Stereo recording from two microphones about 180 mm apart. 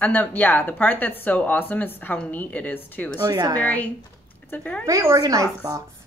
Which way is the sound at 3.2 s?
20° right (ahead or behind).